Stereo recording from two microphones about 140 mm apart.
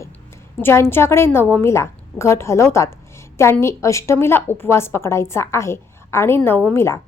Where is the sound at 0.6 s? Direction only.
15° left (ahead or behind).